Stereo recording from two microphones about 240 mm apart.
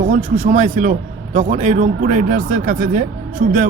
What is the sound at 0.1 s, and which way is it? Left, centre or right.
A man's voice, right.